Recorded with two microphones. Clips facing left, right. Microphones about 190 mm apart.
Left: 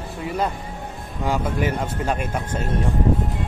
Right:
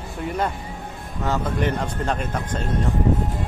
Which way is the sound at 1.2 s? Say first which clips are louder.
Even; 10° left (ahead or behind).